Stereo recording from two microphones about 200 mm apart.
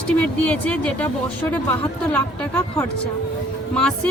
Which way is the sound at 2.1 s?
10° left (ahead or behind).